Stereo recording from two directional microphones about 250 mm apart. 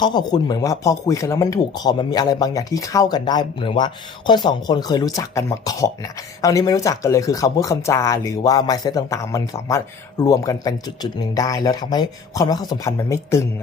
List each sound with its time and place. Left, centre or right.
0.0 s speech: centre